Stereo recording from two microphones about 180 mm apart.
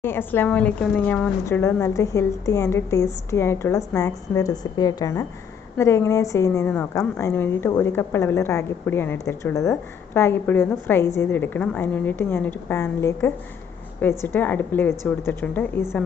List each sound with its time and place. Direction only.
0.0 s a woman's voice: 10° left (ahead or behind)